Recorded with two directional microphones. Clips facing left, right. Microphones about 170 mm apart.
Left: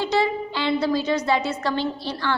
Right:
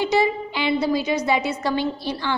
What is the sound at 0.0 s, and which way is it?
A woman's voice, 15° right (ahead or behind).